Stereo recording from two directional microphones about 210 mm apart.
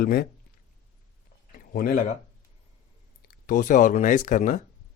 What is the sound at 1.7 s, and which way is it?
Speech, 40° left (ahead or behind).